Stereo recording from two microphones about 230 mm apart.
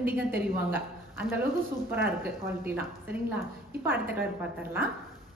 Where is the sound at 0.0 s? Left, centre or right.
Centre.